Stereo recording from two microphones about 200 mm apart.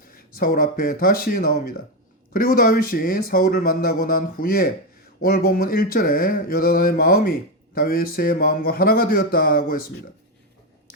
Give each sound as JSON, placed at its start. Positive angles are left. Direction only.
{"t": 0.1, "sound": "speech", "side_deg": 45}
{"t": 2.3, "sound": "mantra", "side_deg": 45}